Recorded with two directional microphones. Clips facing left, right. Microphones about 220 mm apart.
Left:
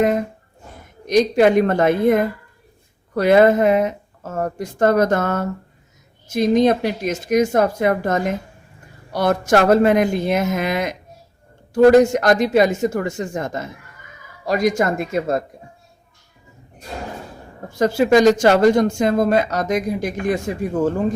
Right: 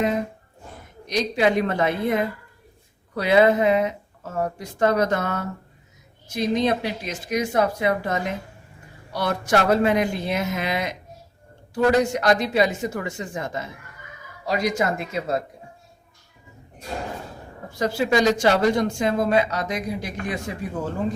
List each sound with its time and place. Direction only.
1.0 s speech: 50° left (ahead or behind)
17.7 s speech: 50° left (ahead or behind)